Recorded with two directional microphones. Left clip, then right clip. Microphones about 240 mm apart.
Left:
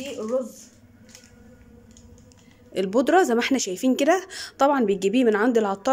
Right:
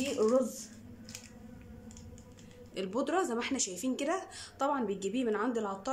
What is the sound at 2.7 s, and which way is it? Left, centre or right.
Speech, left.